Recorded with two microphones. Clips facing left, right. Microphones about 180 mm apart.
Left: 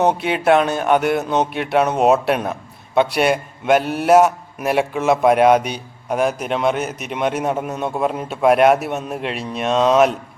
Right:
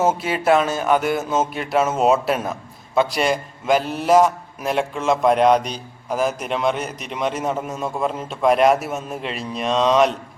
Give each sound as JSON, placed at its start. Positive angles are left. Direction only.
{"t": 0.0, "sound": "a man's voice", "side_deg": 0}
{"t": 0.4, "sound": "speech", "side_deg": 60}
{"t": 0.9, "sound": "a man's voice", "side_deg": 0}
{"t": 3.7, "sound": "a man's voice", "side_deg": 5}